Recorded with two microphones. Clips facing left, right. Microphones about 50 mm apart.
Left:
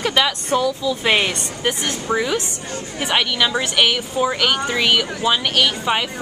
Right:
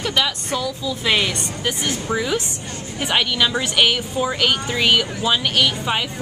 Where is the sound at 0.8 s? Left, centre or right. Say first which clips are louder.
Left 2 dB; left.